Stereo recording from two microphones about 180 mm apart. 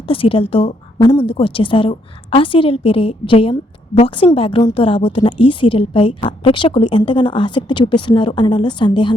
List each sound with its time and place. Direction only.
0.1 s a woman's voice: 30° left (ahead or behind)
0.9 s a woman's voice: 20° left (ahead or behind)
1.2 s a woman's voice: 30° left (ahead or behind)